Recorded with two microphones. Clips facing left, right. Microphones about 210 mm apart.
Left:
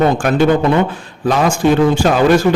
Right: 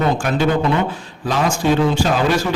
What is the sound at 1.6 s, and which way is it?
Speech, 55° left (ahead or behind).